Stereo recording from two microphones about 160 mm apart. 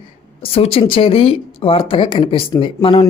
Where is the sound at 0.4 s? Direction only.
40° left (ahead or behind).